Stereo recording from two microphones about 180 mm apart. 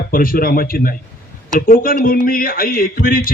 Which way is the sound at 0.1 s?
50° left (ahead or behind).